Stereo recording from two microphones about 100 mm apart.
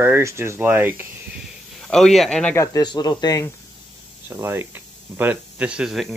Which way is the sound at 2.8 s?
45° left (ahead or behind).